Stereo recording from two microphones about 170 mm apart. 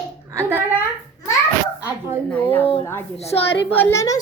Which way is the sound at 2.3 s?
10° left (ahead or behind).